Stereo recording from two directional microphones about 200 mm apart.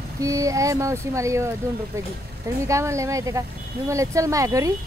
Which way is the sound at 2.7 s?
15° right (ahead or behind).